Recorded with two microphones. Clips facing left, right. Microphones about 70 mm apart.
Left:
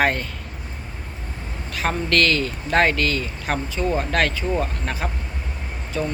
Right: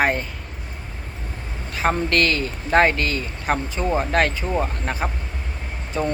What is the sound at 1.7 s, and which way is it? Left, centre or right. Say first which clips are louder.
Speech: right 1 dB; right.